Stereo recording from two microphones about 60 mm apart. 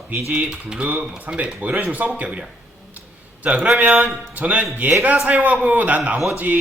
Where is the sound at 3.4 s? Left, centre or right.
Right.